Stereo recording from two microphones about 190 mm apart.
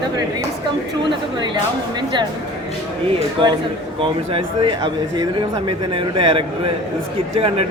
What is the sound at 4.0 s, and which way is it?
Speech, 30° right (ahead or behind).